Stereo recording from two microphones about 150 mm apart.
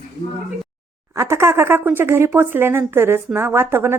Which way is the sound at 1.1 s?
15° right (ahead or behind).